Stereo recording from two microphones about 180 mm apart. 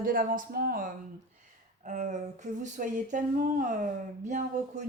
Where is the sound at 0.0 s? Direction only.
50° right (ahead or behind).